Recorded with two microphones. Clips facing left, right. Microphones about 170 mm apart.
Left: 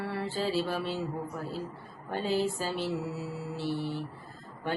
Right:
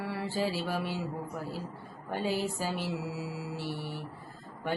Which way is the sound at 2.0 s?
15° right (ahead or behind).